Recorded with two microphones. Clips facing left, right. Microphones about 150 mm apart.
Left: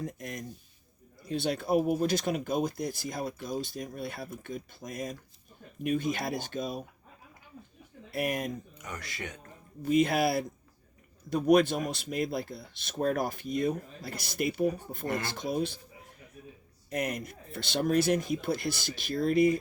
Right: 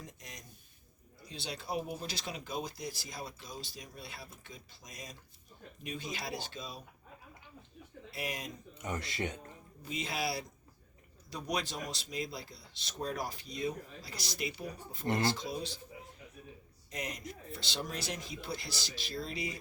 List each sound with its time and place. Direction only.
0.0 s speech: 55° left (ahead or behind)
8.1 s speech: 55° left (ahead or behind)
8.8 s speech: 25° right (ahead or behind)
9.8 s speech: 55° left (ahead or behind)
15.0 s speech: 25° right (ahead or behind)
15.3 s speech: 55° left (ahead or behind)
16.9 s speech: 55° left (ahead or behind)